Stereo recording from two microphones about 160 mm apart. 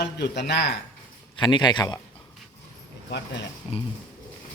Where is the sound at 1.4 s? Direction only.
30° left (ahead or behind).